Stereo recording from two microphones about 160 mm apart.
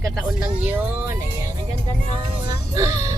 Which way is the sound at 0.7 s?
10° right (ahead or behind).